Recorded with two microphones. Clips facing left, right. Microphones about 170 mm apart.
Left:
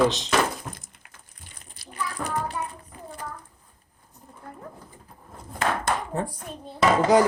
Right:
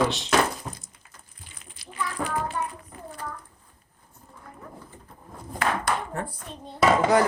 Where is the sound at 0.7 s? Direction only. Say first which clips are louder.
Right 1 dB; 10° right (ahead or behind).